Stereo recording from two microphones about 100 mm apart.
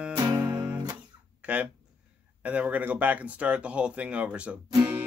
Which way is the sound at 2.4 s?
15° right (ahead or behind).